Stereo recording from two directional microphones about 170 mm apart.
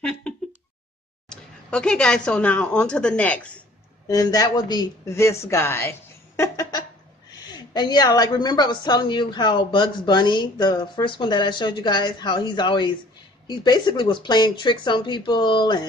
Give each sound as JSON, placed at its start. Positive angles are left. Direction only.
{"t": 1.3, "sound": "a woman's voice", "side_deg": 5}
{"t": 4.1, "sound": "a woman's voice", "side_deg": 20}